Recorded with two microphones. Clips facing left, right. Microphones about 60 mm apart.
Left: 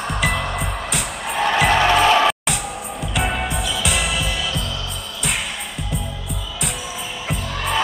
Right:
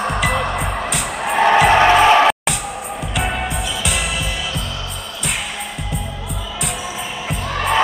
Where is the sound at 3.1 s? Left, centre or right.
Centre.